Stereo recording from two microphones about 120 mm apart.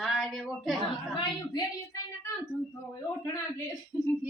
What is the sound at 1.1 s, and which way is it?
Speech, 40° left (ahead or behind).